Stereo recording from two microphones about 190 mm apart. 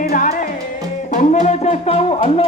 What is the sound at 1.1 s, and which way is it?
Speech, 40° left (ahead or behind).